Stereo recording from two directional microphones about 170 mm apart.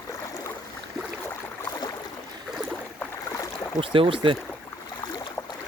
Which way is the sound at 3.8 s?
30° right (ahead or behind).